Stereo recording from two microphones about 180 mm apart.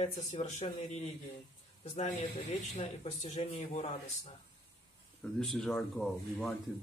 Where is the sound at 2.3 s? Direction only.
35° left (ahead or behind).